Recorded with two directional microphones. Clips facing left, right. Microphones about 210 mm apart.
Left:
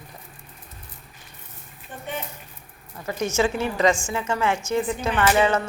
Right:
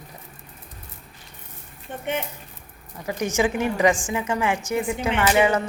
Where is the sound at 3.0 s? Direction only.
15° right (ahead or behind).